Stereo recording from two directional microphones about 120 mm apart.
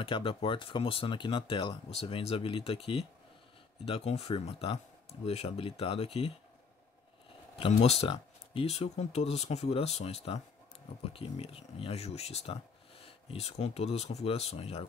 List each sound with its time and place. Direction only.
0.0 s speech: 50° left (ahead or behind)
7.5 s speech: 55° left (ahead or behind)